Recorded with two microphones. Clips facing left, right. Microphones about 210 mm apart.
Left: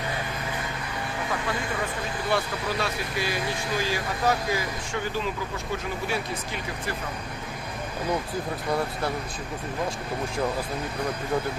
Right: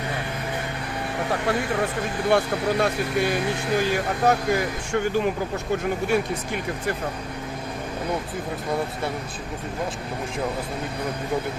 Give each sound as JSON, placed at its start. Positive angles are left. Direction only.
{"t": 1.3, "sound": "speech", "side_deg": -70}
{"t": 2.3, "sound": "speech", "side_deg": -50}